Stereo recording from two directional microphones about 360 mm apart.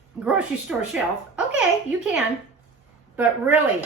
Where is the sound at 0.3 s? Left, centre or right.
Centre.